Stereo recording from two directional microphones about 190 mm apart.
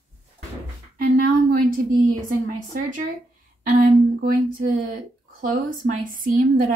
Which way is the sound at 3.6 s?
45° right (ahead or behind).